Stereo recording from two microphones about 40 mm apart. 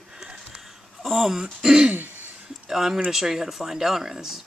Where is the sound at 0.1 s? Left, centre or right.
Centre.